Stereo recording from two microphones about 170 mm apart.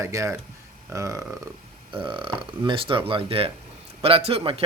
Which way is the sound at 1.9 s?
30° right (ahead or behind).